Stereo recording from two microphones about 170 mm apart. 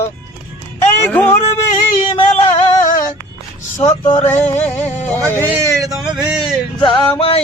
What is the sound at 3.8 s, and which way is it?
Music, 35° left (ahead or behind).